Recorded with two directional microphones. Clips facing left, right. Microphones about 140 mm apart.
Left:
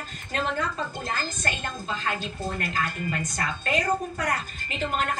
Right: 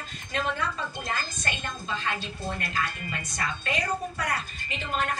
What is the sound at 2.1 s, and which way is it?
Speech, 45° left (ahead or behind).